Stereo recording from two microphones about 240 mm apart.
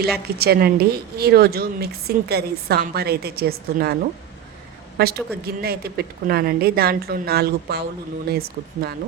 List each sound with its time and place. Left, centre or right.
0.0 s a woman's voice: right
4.9 s a woman's voice: right